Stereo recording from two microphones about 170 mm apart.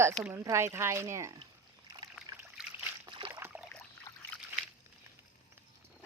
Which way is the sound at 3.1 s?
30° right (ahead or behind).